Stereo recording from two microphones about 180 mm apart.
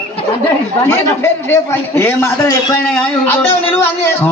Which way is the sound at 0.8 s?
15° left (ahead or behind).